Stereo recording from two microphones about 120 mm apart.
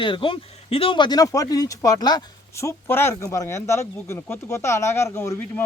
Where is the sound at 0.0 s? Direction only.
45° left (ahead or behind).